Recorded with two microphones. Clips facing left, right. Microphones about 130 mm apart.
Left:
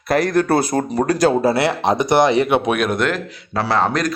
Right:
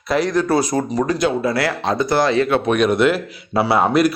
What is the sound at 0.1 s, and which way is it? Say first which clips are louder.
Speech: left 1 dB; 50° left (ahead or behind).